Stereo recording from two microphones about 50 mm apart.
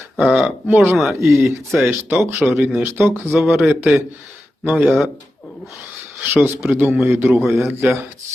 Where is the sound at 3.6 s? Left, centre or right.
Right.